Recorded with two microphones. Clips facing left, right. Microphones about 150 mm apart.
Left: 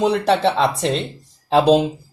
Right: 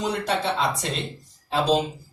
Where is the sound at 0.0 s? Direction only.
65° left (ahead or behind).